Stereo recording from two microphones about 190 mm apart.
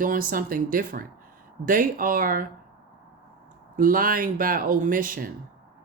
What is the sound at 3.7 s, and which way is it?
Speech, 45° right (ahead or behind).